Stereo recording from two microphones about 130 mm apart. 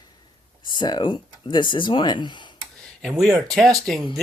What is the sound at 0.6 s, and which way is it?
Speech, 35° left (ahead or behind).